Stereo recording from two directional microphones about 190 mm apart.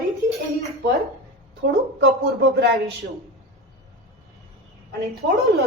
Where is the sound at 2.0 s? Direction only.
70° right (ahead or behind).